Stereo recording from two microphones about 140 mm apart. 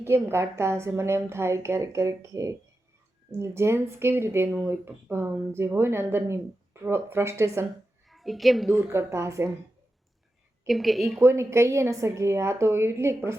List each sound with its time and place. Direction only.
0.0 s a woman's voice: 15° right (ahead or behind)
8.0 s a woman's voice: centre (ahead or behind)
8.7 s a woman's voice: 20° right (ahead or behind)
10.7 s a woman's voice: centre (ahead or behind)
11.2 s a woman's voice: 20° right (ahead or behind)